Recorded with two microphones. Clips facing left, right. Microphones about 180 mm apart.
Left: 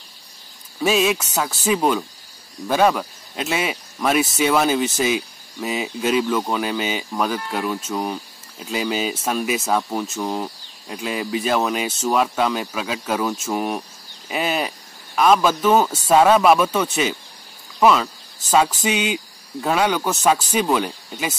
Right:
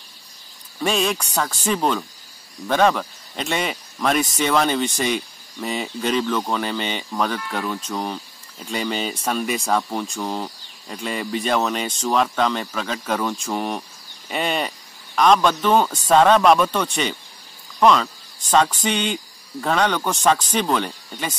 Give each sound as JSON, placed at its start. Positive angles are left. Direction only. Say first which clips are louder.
{"t": 0.7, "sound": "speech", "louder": "left 3 dB", "side_deg": 5}